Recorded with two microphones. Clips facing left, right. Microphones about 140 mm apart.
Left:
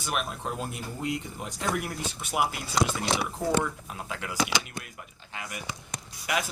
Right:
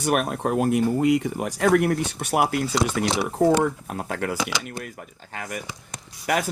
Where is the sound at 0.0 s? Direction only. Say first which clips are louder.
Right 9 dB; 55° right (ahead or behind).